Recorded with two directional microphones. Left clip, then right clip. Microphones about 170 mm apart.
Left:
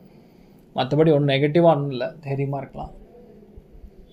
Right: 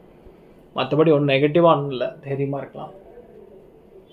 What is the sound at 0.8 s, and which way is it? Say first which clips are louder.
Speech: right 1 dB; 35° left (ahead or behind).